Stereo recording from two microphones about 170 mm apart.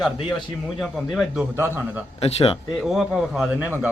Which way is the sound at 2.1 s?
35° left (ahead or behind).